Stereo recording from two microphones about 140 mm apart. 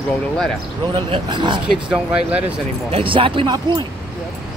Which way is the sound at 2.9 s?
40° right (ahead or behind).